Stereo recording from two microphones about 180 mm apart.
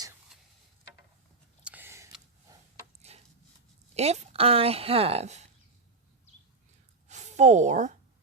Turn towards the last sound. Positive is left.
turn(degrees=-40)  # may be behind; listen again after turning